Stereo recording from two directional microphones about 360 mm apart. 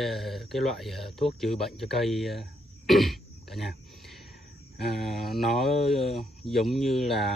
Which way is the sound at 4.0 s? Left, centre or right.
Centre.